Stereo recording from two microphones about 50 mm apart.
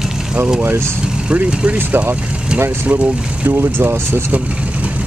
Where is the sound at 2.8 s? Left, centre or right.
Right.